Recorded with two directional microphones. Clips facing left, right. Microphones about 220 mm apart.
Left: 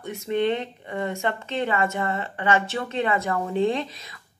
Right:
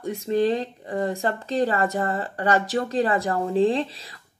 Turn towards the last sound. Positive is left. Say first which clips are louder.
# right 3 dB
turn(degrees=-30)  # may be behind; listen again after turning